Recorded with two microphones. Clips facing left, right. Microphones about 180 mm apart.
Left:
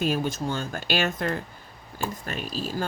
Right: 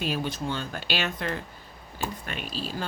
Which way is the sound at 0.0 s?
45° left (ahead or behind).